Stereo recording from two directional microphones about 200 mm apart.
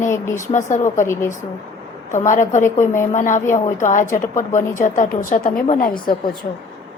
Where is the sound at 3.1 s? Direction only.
40° left (ahead or behind).